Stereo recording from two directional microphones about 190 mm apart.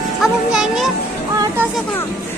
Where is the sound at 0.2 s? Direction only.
Centre (ahead or behind).